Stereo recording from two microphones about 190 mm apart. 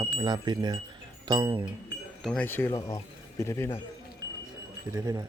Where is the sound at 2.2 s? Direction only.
5° left (ahead or behind).